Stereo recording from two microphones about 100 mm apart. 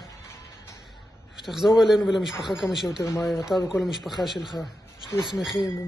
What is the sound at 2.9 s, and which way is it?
Speech, 35° left (ahead or behind).